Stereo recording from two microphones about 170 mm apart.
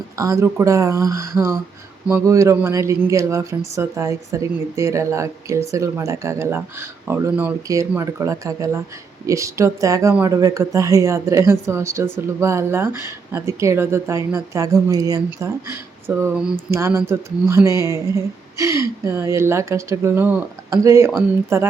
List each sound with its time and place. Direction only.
0.2 s a woman's voice: 20° right (ahead or behind)
16.3 s speech: 5° right (ahead or behind)
16.7 s a woman's voice: 15° right (ahead or behind)